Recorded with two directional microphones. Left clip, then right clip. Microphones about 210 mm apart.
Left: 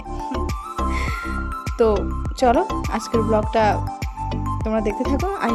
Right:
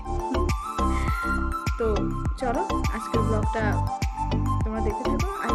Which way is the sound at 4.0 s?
Centre (ahead or behind).